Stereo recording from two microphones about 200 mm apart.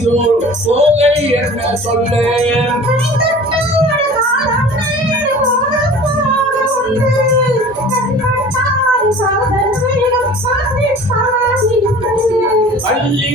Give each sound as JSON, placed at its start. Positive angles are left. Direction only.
{"t": 0.7, "sound": "music", "side_deg": -35}